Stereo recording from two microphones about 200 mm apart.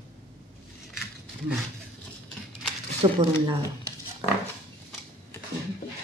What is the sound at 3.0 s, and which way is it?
Speech, 25° right (ahead or behind).